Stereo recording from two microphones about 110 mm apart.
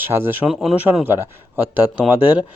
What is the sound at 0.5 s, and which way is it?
Speech, centre (ahead or behind).